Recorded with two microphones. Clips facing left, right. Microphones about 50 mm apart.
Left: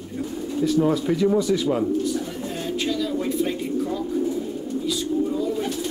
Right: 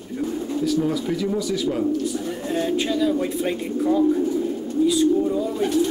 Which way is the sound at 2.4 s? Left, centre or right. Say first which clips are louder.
Right 6 dB; right.